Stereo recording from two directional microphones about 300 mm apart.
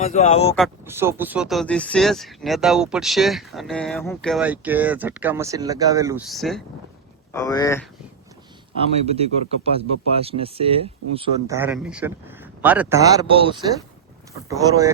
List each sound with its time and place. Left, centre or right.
0.0 s speech: left
0.5 s speech: centre
7.3 s speech: centre
9.0 s a man's voice: centre